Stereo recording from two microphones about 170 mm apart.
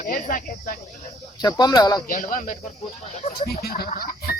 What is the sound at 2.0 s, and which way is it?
Speech, 50° left (ahead or behind).